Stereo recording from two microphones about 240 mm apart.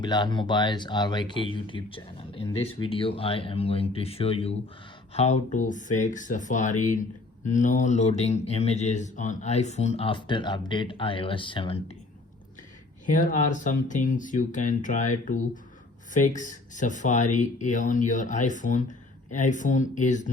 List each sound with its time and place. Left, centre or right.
0.0 s speech: centre
13.1 s speech: left